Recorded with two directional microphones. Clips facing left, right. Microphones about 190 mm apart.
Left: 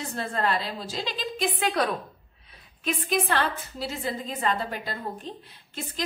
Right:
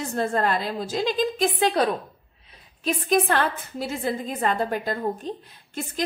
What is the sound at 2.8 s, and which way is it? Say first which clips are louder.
A woman's voice: right 5 dB; 40° right (ahead or behind).